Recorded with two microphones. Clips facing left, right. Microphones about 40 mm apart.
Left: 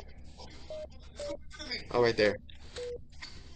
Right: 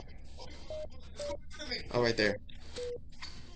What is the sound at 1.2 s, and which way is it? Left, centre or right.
Music, left.